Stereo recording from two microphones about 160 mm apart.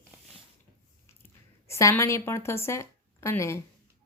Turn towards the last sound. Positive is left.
turn(degrees=15)  # may be behind; listen again after turning